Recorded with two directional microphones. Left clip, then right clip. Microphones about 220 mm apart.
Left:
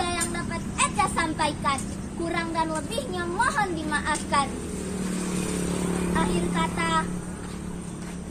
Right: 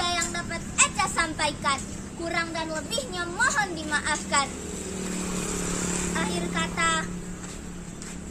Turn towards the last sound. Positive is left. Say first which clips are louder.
# even
turn(degrees=-15)  # may be behind; listen again after turning